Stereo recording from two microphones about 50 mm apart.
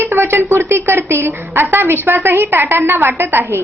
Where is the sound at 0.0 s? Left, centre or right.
Right.